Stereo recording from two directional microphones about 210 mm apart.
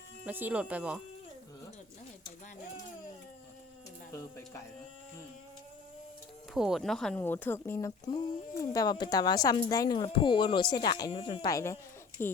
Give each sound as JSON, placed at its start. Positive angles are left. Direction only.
{"t": 0.3, "sound": "speech", "side_deg": -10}
{"t": 4.1, "sound": "speech", "side_deg": 15}
{"t": 6.5, "sound": "speech", "side_deg": 0}